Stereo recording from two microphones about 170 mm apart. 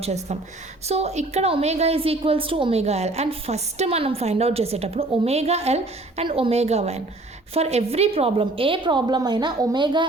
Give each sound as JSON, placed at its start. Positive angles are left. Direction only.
{"t": 0.0, "sound": "a woman's voice", "side_deg": -40}